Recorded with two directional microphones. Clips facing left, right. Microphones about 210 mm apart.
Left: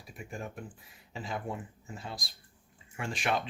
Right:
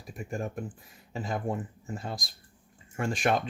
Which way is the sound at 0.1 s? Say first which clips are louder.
Right 7 dB; 45° right (ahead or behind).